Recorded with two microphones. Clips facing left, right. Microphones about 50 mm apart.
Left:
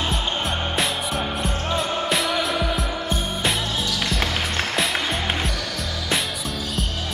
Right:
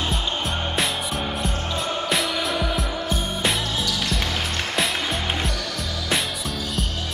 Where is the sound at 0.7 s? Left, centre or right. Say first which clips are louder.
Left 1 dB; centre.